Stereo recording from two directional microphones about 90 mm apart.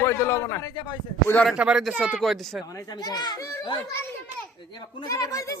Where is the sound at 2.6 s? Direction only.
40° left (ahead or behind).